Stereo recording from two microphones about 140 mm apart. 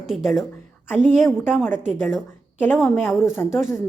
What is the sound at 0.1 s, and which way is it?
Speech, centre (ahead or behind).